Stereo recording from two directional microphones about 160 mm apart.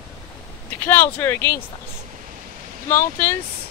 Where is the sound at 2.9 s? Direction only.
15° left (ahead or behind).